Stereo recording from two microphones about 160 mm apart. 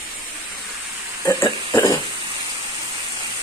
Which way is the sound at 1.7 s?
20° left (ahead or behind).